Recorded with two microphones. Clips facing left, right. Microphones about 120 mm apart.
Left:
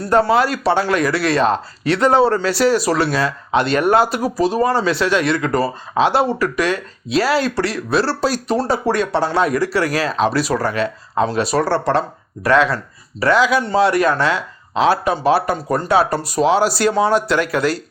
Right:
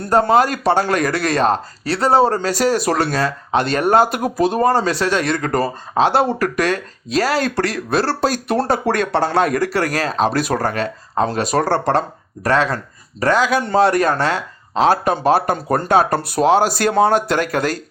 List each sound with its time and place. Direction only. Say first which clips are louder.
0.1 s speech: right 1 dB; 45° right (ahead or behind)